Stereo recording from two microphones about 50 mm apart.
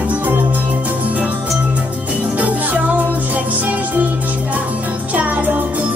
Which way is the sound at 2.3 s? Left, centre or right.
Right.